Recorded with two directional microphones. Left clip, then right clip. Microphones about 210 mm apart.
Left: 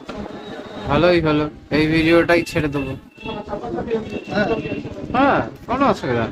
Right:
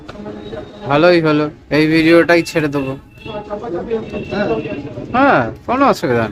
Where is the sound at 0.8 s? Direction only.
20° right (ahead or behind).